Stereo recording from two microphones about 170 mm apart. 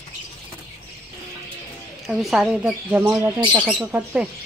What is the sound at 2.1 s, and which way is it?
Speech, centre (ahead or behind).